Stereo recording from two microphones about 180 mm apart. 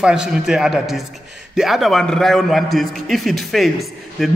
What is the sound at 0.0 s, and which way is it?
A man's voice, 5° right (ahead or behind).